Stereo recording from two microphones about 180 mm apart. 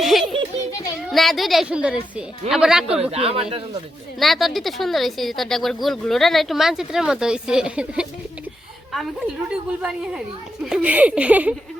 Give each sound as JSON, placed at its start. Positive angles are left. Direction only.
{"t": 0.0, "sound": "children playing", "side_deg": 0}
{"t": 1.1, "sound": "speech", "side_deg": 0}
{"t": 3.0, "sound": "speech", "side_deg": -35}
{"t": 4.2, "sound": "speech", "side_deg": 0}